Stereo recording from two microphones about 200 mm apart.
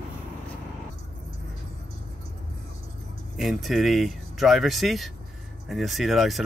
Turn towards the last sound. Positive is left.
turn(degrees=0)  # may be behind; listen again after turning